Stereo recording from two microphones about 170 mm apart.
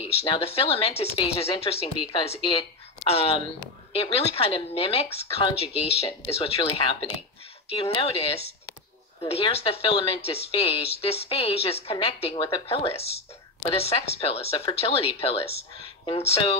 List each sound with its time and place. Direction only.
0.0 s speech: 35° left (ahead or behind)